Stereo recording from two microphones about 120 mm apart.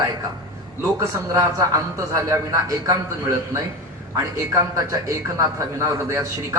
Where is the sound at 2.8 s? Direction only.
25° right (ahead or behind).